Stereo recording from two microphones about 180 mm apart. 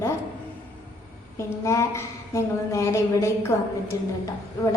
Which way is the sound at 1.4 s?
15° left (ahead or behind).